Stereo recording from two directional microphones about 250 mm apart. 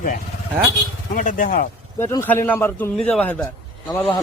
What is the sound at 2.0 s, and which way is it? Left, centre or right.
A man's voice, centre.